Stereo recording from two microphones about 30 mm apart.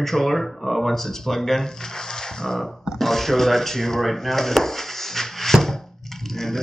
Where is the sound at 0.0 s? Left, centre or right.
Centre.